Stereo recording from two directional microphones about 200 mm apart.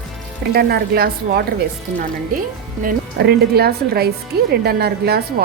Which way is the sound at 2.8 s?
50° right (ahead or behind).